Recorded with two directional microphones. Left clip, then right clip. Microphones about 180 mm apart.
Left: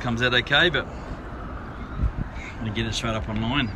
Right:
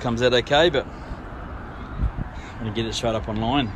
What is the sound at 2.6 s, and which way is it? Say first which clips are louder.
Speech: right 3 dB; 15° right (ahead or behind).